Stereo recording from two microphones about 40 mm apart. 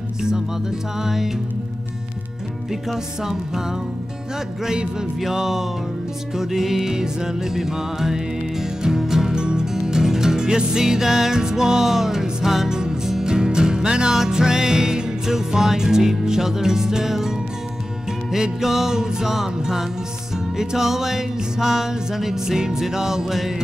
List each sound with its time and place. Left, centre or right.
1.0 s music: centre
2.7 s music: centre
5.2 s music: centre
9.3 s music: right
18.3 s music: centre